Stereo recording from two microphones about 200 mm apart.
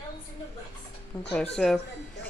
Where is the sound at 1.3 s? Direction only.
5° left (ahead or behind).